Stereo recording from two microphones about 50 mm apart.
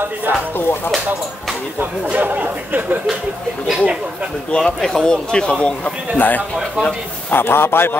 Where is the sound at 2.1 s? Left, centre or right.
Right.